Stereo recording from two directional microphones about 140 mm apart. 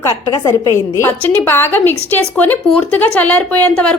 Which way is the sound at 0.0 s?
25° left (ahead or behind).